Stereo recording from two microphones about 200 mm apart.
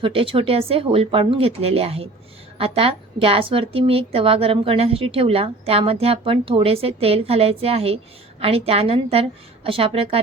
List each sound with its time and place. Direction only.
0.0 s a woman's voice: 25° right (ahead or behind)